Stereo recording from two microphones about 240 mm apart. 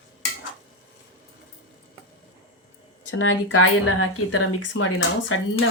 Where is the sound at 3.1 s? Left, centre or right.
Left.